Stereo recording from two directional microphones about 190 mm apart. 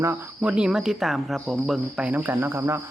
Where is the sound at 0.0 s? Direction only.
10° right (ahead or behind).